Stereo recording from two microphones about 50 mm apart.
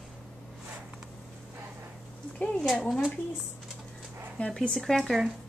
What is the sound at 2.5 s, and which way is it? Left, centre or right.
Speech, centre.